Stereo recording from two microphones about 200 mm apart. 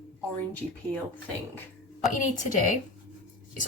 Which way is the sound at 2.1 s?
40° left (ahead or behind).